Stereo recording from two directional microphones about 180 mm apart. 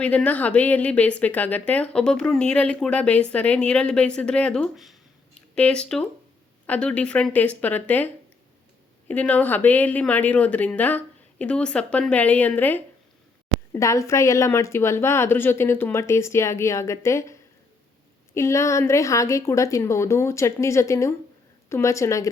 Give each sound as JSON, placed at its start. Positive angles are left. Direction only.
{"t": 0.0, "sound": "speech", "side_deg": 5}
{"t": 18.3, "sound": "speech", "side_deg": 15}